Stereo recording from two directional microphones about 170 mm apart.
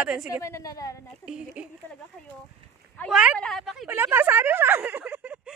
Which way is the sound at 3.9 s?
15° right (ahead or behind).